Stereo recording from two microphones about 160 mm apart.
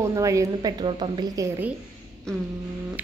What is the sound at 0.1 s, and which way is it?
A woman's voice, 20° right (ahead or behind).